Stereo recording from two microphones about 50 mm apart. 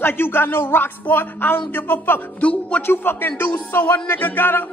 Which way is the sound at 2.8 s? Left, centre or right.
Left.